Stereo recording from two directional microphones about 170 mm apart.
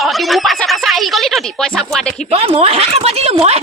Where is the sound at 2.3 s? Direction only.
35° right (ahead or behind).